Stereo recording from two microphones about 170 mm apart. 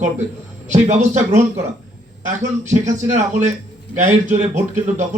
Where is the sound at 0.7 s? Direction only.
45° right (ahead or behind).